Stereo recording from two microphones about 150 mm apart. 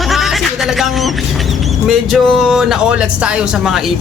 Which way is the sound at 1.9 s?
Centre (ahead or behind).